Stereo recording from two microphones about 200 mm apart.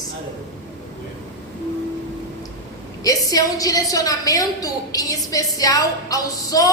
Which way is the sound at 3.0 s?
20° left (ahead or behind).